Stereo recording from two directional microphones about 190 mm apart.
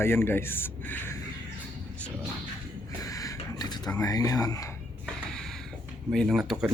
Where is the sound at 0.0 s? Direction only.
10° left (ahead or behind).